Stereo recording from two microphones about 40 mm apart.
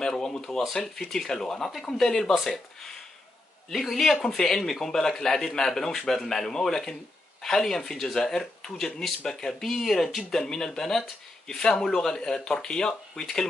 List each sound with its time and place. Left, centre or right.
0.0 s speech: centre
3.9 s speech: centre